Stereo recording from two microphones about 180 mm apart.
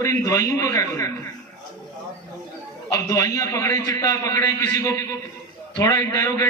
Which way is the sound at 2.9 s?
20° left (ahead or behind).